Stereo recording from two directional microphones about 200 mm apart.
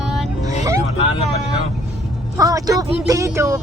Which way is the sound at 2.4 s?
15° right (ahead or behind).